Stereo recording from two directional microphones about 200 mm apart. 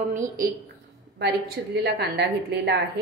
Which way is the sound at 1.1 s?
55° right (ahead or behind).